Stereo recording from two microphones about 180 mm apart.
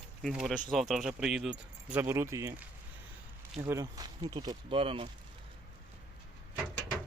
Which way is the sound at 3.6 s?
15° right (ahead or behind).